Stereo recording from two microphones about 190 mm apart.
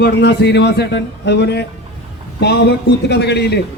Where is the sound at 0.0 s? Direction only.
65° left (ahead or behind).